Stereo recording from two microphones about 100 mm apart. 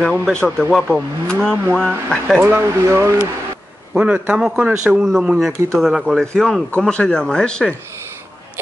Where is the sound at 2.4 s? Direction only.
25° right (ahead or behind).